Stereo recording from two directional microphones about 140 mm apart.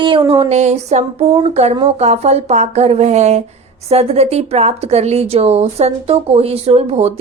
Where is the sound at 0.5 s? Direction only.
50° right (ahead or behind).